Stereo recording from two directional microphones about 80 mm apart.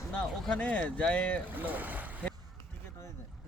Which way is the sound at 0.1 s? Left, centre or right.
Centre.